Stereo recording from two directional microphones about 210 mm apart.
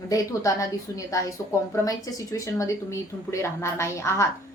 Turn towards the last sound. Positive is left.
turn(degrees=15)  # may be behind; listen again after turning